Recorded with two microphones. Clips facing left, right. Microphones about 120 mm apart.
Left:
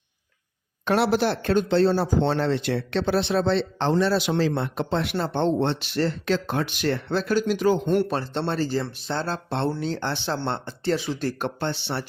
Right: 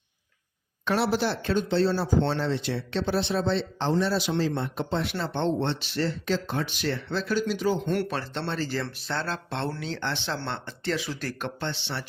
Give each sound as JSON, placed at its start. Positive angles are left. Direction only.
{"t": 0.9, "sound": "speech", "side_deg": 60}
{"t": 5.1, "sound": "speech", "side_deg": 45}
{"t": 8.1, "sound": "speech", "side_deg": 35}